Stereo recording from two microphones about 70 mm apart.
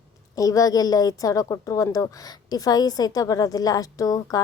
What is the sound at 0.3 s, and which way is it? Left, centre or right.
A woman's voice, left.